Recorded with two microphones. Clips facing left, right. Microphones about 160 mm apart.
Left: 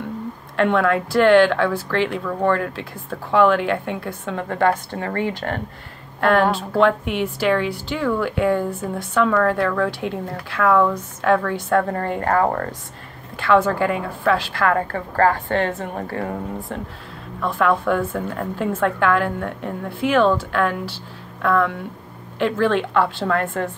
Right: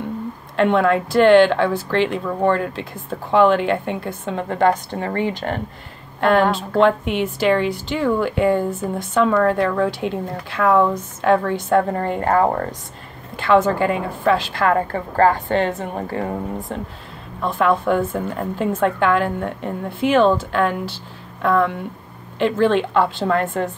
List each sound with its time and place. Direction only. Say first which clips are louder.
0.6 s a woman's voice: right 2 dB; 20° right (ahead or behind)
6.4 s speech: right 1 dB; 10° left (ahead or behind)
6.8 s a woman's voice: right 2 dB; 20° right (ahead or behind)
17.4 s a woman's voice: right 1 dB; 25° right (ahead or behind)